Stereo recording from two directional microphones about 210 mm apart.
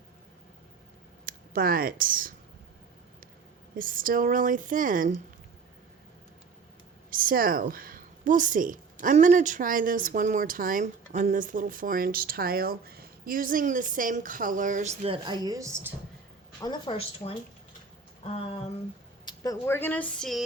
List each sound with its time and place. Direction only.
1.2 s speech: 45° right (ahead or behind)
3.8 s a woman's voice: 40° right (ahead or behind)
7.1 s a woman's voice: 40° right (ahead or behind); by 15.9 s 15° right (ahead or behind)
16.6 s speech: 20° left (ahead or behind)
18.2 s a sound: 25° left (ahead or behind)
19.2 s speech: 20° left (ahead or behind); by 20.4 s centre (ahead or behind)